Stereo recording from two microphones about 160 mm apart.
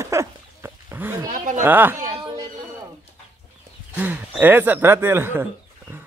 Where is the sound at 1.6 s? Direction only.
10° right (ahead or behind).